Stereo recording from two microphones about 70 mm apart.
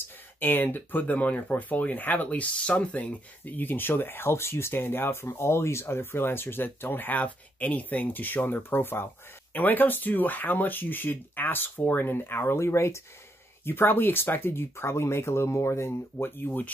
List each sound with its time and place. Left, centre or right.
0.4 s speech: left
13.7 s speech: left